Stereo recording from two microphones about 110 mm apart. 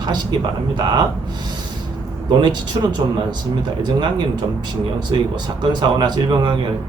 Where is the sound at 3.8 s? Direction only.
40° right (ahead or behind).